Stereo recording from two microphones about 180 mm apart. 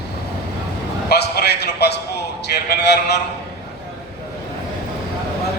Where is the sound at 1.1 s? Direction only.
65° left (ahead or behind).